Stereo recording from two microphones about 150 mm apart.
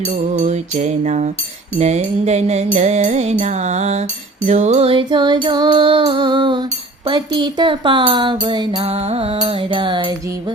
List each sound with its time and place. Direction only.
0.3 s music: 50° right (ahead or behind); by 8.8 s 30° right (ahead or behind)
8.8 s music: 40° right (ahead or behind)